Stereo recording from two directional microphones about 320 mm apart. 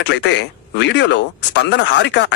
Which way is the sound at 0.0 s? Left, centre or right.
Left.